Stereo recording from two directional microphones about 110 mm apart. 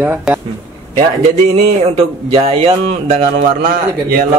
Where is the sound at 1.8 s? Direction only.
60° right (ahead or behind).